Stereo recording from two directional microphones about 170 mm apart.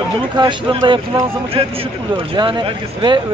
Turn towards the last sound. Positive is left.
turn(degrees=-30)  # may be behind; listen again after turning